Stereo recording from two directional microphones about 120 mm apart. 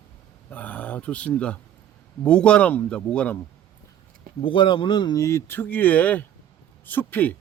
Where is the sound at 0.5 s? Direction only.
15° left (ahead or behind).